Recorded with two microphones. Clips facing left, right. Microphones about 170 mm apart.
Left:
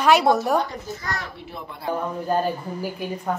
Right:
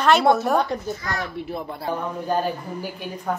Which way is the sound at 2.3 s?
Centre (ahead or behind).